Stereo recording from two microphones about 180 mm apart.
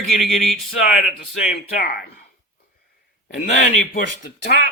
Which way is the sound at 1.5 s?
55° left (ahead or behind).